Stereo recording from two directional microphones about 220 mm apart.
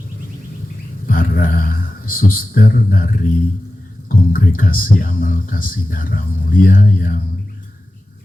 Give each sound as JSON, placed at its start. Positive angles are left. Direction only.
{"t": 1.0, "sound": "a man's voice", "side_deg": 40}
{"t": 4.1, "sound": "speech", "side_deg": 40}